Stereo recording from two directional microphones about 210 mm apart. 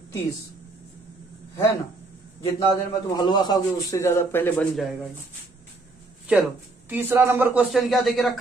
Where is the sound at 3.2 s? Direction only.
20° left (ahead or behind).